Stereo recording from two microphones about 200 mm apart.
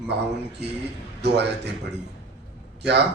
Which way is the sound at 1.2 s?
55° right (ahead or behind).